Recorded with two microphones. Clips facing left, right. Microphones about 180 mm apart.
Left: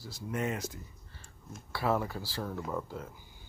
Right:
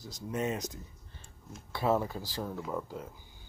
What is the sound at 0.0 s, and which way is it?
Speech, 20° right (ahead or behind).